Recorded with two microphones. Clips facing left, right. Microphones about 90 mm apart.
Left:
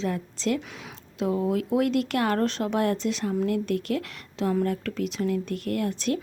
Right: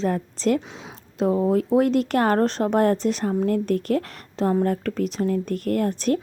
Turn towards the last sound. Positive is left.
turn(degrees=-40)  # may be behind; listen again after turning